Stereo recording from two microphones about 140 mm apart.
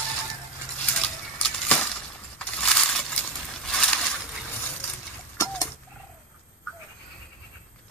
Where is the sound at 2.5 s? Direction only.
5° left (ahead or behind).